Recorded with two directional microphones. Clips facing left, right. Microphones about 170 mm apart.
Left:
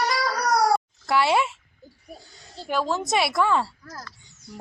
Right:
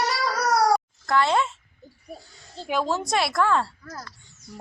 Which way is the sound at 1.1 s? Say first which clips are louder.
Left 1 dB; 10° left (ahead or behind).